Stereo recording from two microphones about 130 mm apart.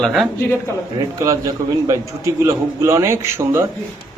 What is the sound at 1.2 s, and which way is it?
A man's voice, 25° right (ahead or behind).